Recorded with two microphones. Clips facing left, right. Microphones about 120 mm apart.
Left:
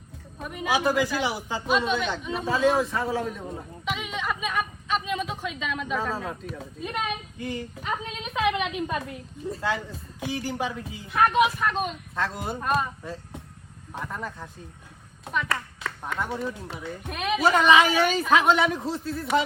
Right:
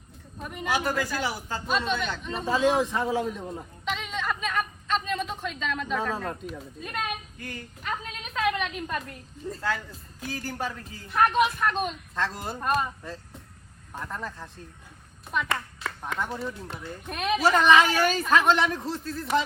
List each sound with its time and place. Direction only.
0.4 s speech: 5° left (ahead or behind)
0.9 s speech: 15° left (ahead or behind)
3.3 s a sound: centre (ahead or behind)
8.0 s a woman's voice: 20° left (ahead or behind); by 9.6 s 5° left (ahead or behind)
9.6 s a woman's voice: 20° left (ahead or behind); by 19.1 s 5° left (ahead or behind)